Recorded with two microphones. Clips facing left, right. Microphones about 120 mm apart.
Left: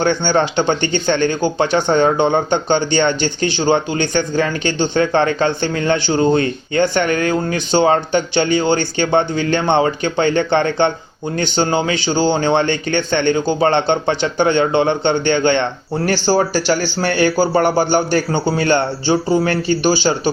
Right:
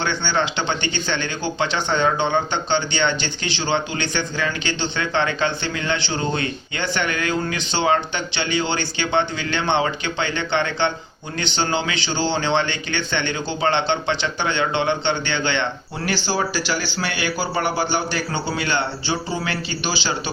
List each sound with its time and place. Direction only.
0.0 s speech: 50° left (ahead or behind)